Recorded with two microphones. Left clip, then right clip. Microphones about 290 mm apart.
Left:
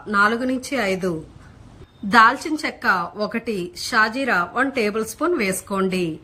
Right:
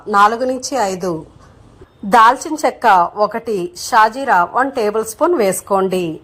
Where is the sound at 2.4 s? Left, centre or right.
Centre.